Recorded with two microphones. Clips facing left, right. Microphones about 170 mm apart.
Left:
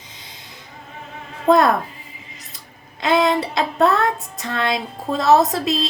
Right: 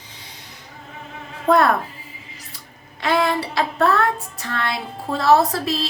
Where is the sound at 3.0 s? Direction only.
20° left (ahead or behind).